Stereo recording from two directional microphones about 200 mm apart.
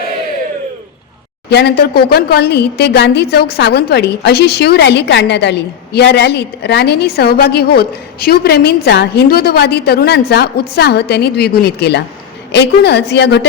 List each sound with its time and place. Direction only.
1.5 s a woman's voice: 55° left (ahead or behind)